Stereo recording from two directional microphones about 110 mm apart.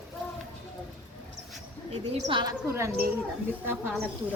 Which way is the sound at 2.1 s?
45° right (ahead or behind).